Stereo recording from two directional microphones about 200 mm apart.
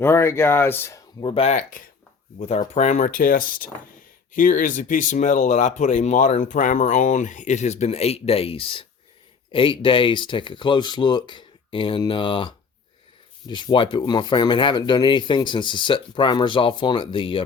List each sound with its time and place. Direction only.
0.0 s speech: 10° left (ahead or behind)
1.2 s speech: 30° left (ahead or behind)